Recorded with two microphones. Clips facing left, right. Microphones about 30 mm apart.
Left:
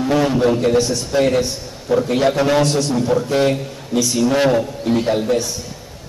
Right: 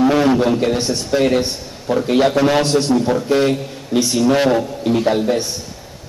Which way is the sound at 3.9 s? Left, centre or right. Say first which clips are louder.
Right 2 dB; right.